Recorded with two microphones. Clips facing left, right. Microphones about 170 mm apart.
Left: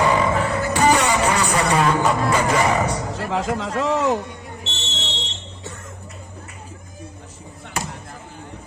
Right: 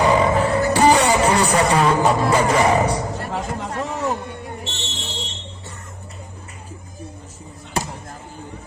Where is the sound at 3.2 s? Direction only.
90° left.